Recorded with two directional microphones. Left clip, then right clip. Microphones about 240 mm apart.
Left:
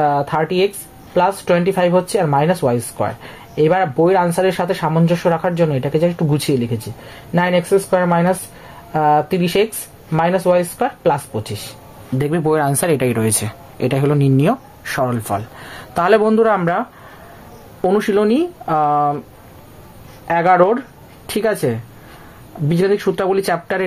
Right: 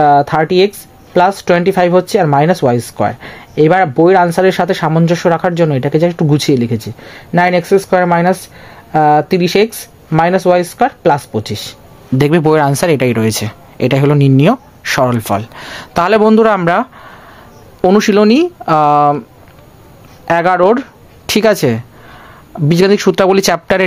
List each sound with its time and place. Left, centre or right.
0.0 s speech: right
17.8 s speech: right
20.2 s speech: right